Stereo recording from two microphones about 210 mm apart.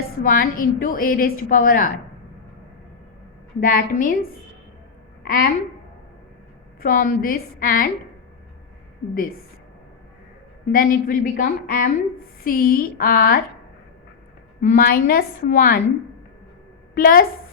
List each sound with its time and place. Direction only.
0.2 s a woman's voice: 40° left (ahead or behind)
3.6 s a woman's voice: 40° left (ahead or behind)
6.8 s a woman's voice: 40° left (ahead or behind)
10.7 s a woman's voice: 40° left (ahead or behind)
14.6 s a woman's voice: 40° left (ahead or behind)
16.9 s a woman's voice: 40° left (ahead or behind)